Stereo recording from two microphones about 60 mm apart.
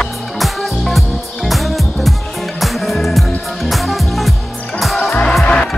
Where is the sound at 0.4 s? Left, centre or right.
Centre.